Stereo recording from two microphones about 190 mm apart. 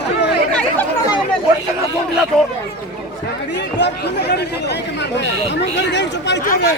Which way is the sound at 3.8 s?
60° left (ahead or behind).